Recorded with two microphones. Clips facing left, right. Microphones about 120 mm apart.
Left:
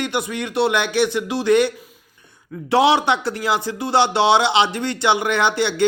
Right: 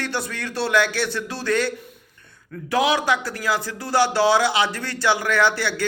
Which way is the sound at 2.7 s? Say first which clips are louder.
Left 4 dB; 25° left (ahead or behind).